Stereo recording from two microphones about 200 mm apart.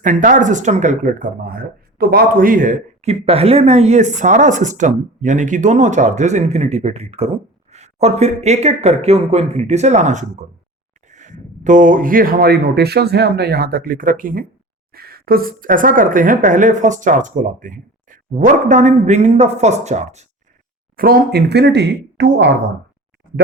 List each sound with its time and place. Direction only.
0.0 s speech: 40° right (ahead or behind)
20.9 s speech: 45° right (ahead or behind)